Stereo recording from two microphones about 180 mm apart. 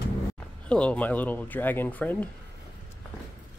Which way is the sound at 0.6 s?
5° left (ahead or behind).